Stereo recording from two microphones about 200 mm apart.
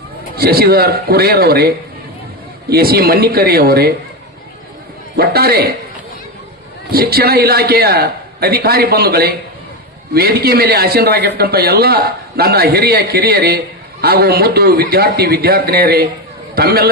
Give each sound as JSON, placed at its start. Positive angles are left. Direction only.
{"t": 0.3, "sound": "a man's voice", "side_deg": -50}
{"t": 5.1, "sound": "a man's voice", "side_deg": -50}
{"t": 6.9, "sound": "a man's voice", "side_deg": -50}